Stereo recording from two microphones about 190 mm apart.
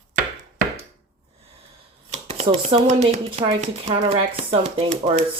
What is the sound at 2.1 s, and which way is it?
Speech, 35° right (ahead or behind).